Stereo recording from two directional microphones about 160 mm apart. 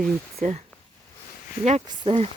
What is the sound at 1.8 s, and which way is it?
Speech, 35° right (ahead or behind).